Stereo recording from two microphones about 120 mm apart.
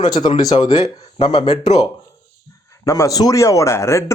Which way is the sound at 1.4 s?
60° left (ahead or behind).